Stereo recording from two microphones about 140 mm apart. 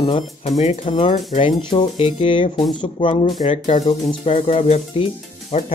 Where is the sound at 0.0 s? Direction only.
45° left (ahead or behind).